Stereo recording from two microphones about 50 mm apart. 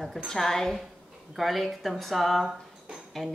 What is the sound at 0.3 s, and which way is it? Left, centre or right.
A woman's voice, centre.